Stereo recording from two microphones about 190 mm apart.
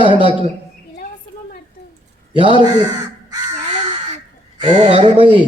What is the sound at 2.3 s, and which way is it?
Speech, 25° right (ahead or behind).